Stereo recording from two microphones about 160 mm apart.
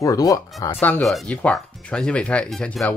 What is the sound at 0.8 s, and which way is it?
Speech, 5° left (ahead or behind).